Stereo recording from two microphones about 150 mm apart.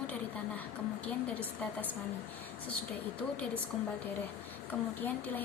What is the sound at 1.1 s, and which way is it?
Speech, 10° left (ahead or behind).